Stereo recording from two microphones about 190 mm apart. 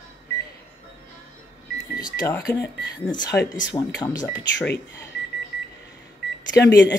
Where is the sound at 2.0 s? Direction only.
15° left (ahead or behind).